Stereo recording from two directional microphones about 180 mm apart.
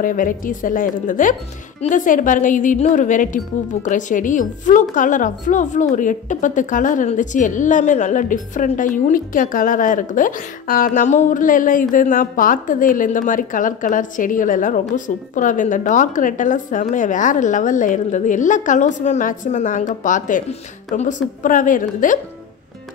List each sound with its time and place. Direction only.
0.0 s a woman's voice: 50° left (ahead or behind)